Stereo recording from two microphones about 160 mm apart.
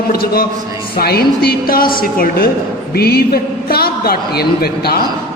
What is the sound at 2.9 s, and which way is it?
A man's voice, 80° left.